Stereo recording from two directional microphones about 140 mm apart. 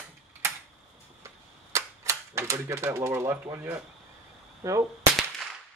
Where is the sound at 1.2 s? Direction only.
20° right (ahead or behind).